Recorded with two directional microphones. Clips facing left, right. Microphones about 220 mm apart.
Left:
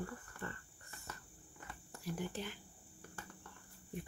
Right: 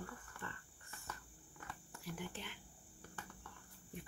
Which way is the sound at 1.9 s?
40° left (ahead or behind).